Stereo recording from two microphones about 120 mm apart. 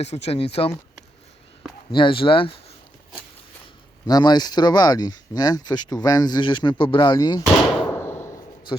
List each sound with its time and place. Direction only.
0.0 s speech: 65° left (ahead or behind)
1.9 s speech: 45° left (ahead or behind)
4.0 s speech: 35° left (ahead or behind)
7.9 s a sound: 20° left (ahead or behind)